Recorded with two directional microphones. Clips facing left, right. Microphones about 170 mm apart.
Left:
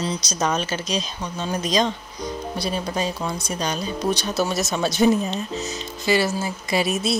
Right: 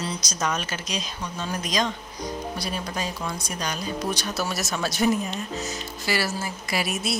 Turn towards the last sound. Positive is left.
turn(degrees=25)  # may be behind; listen again after turning